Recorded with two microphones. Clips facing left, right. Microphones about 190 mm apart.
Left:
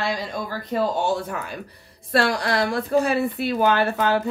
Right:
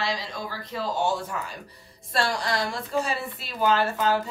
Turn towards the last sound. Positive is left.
turn(degrees=65)  # may be behind; listen again after turning